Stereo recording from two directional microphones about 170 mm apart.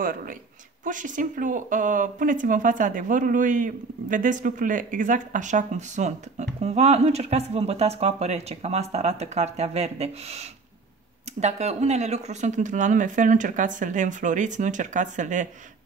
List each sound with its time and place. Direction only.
0.0 s speech: 55° right (ahead or behind)